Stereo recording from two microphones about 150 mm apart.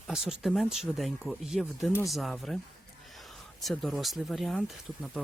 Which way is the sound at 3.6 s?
Centre (ahead or behind).